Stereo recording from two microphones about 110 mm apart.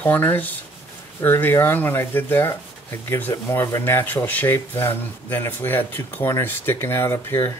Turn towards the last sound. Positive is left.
turn(degrees=25)  # may be behind; listen again after turning